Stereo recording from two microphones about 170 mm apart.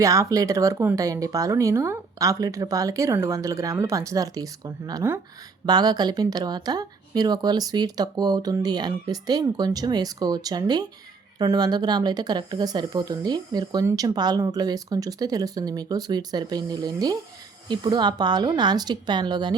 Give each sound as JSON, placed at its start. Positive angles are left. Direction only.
{"t": 0.0, "sound": "speech", "side_deg": -20}